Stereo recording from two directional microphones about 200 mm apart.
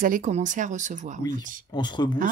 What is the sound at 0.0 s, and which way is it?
Speech, 40° right (ahead or behind).